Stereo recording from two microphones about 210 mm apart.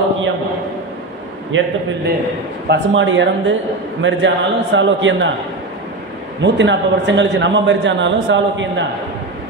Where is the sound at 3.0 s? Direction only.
65° right (ahead or behind).